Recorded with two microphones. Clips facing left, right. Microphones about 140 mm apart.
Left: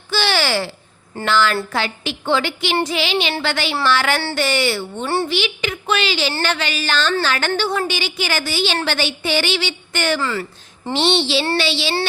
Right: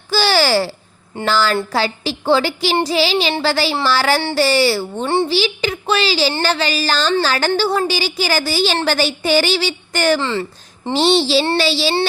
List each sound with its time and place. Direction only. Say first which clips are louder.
0.1 s a sound: right 4 dB; 40° right (ahead or behind)
1.2 s a woman's voice: right 1 dB; 35° right (ahead or behind)
5.0 s a child's voice: right 3 dB; 20° right (ahead or behind)
5.3 s a woman's voice: right 4 dB; 35° right (ahead or behind)
10.2 s a child's voice: right 2 dB; 25° right (ahead or behind)
10.9 s a woman's voice: right 4 dB; 40° right (ahead or behind)